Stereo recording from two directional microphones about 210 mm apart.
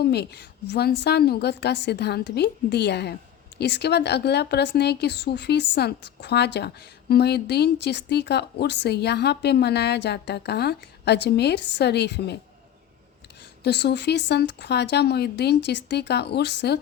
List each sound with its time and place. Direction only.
0.0 s speech: 50° left (ahead or behind)
13.7 s speech: 55° left (ahead or behind)